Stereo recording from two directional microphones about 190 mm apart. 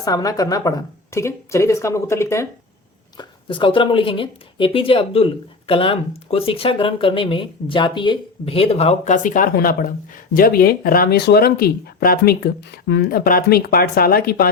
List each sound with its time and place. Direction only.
0.0 s speech: 20° left (ahead or behind)
3.2 s speech: 25° left (ahead or behind); by 14.5 s 55° left (ahead or behind)